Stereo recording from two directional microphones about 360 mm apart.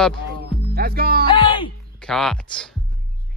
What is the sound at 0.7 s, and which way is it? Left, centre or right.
Speech, right.